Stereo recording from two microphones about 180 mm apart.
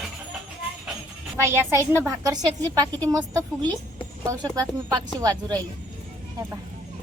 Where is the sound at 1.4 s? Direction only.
15° right (ahead or behind).